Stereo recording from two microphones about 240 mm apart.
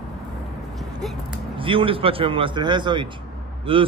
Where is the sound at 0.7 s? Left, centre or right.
Centre.